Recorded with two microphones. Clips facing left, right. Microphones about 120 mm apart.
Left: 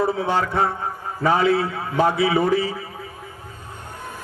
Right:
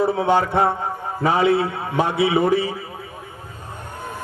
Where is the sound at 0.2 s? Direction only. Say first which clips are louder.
Right 3 dB; 25° right (ahead or behind).